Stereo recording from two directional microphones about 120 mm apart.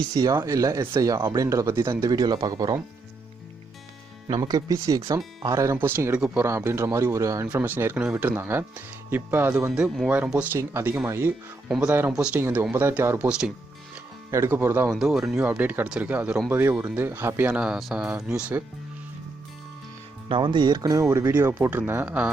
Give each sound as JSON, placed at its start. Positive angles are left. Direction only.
{"t": 0.1, "sound": "speech", "side_deg": -30}
{"t": 4.4, "sound": "speech", "side_deg": -30}
{"t": 7.4, "sound": "speech", "side_deg": -15}
{"t": 9.7, "sound": "speech", "side_deg": -5}
{"t": 11.7, "sound": "speech", "side_deg": -5}
{"t": 12.4, "sound": "speech", "side_deg": -20}
{"t": 13.1, "sound": "speech", "side_deg": -5}
{"t": 14.3, "sound": "speech", "side_deg": -25}
{"t": 14.9, "sound": "speech", "side_deg": 0}
{"t": 15.4, "sound": "speech", "side_deg": -15}
{"t": 17.6, "sound": "speech", "side_deg": 0}
{"t": 20.2, "sound": "speech", "side_deg": -45}